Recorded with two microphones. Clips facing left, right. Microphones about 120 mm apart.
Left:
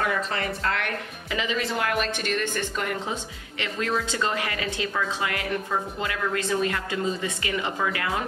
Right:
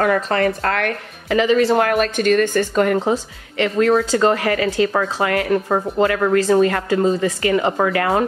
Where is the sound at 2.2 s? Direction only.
50° right (ahead or behind).